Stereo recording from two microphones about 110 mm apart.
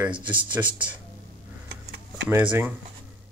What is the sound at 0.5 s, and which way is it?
Speech, 15° right (ahead or behind).